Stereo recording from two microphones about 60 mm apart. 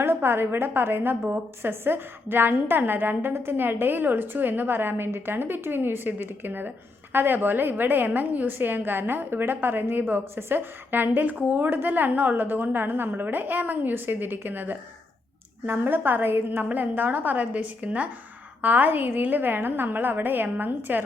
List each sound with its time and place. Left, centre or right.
0.0 s a woman's voice: right